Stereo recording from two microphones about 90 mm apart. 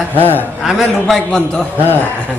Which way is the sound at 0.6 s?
Centre (ahead or behind).